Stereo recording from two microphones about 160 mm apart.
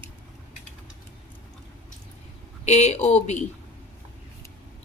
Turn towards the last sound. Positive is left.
turn(degrees=45)  # may be behind; listen again after turning